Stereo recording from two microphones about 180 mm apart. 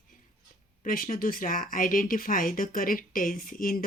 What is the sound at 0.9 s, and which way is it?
Speech, 50° left (ahead or behind).